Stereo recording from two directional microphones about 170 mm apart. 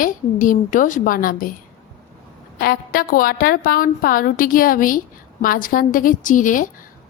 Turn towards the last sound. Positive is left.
turn(degrees=50)  # may be behind; listen again after turning